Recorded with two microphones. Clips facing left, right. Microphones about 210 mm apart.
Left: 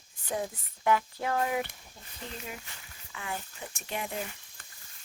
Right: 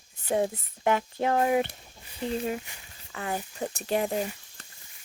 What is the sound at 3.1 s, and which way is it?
Speech, 40° right (ahead or behind).